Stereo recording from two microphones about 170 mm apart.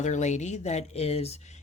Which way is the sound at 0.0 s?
45° left (ahead or behind).